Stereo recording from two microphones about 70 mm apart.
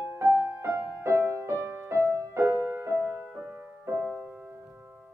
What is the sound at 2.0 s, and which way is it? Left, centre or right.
Music, right.